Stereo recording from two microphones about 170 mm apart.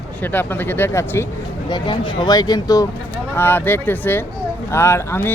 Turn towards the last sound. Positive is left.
turn(degrees=15)  # may be behind; listen again after turning